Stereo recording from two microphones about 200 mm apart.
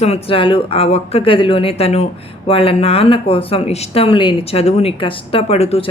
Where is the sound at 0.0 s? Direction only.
30° left (ahead or behind).